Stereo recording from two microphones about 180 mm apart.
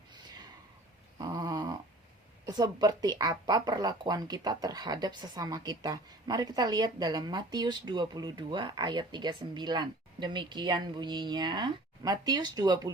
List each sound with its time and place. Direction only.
1.2 s dog: 20° right (ahead or behind)
2.5 s speech: 25° right (ahead or behind)